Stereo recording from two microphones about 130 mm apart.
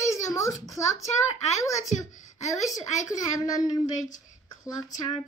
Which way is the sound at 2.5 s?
25° left (ahead or behind).